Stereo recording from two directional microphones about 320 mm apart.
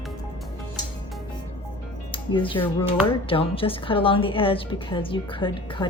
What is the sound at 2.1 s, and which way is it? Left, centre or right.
A woman's voice, centre.